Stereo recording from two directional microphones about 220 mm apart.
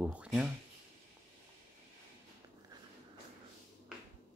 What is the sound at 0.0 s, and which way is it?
Speech, 5° right (ahead or behind).